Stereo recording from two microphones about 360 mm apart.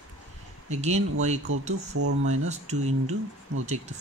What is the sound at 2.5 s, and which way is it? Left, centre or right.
Speech, centre.